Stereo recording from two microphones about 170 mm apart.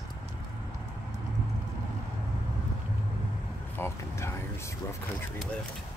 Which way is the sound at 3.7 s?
15° left (ahead or behind).